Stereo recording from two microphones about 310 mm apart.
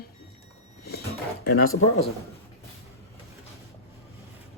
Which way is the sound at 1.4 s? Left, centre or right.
Left.